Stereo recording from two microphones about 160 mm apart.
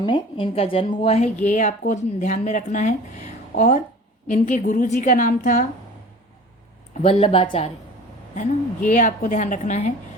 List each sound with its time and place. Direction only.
0.0 s a woman's voice: 30° left (ahead or behind); by 5.6 s 50° left (ahead or behind)
6.9 s speech: 40° left (ahead or behind)
8.4 s a woman's voice: 50° left (ahead or behind)